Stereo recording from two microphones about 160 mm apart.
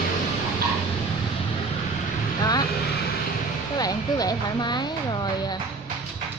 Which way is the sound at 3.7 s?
25° left (ahead or behind).